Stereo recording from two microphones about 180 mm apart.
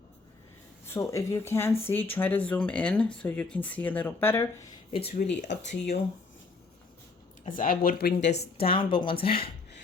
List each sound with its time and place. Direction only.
0.9 s speech: 15° left (ahead or behind)
4.9 s a woman's voice: 35° left (ahead or behind)
7.4 s speech: 50° left (ahead or behind)
8.3 s a woman's voice: 35° left (ahead or behind)